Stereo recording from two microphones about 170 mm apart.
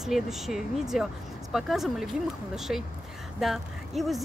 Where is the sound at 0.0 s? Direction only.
Centre (ahead or behind).